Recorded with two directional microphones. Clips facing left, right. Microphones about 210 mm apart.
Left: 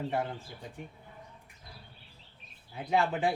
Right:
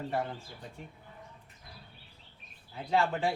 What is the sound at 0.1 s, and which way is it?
Speech, 15° left (ahead or behind).